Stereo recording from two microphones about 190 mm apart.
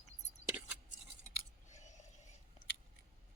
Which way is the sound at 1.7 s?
40° left (ahead or behind).